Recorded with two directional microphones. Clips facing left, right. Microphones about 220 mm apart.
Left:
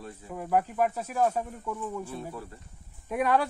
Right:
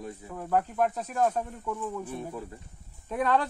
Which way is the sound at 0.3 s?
10° left (ahead or behind).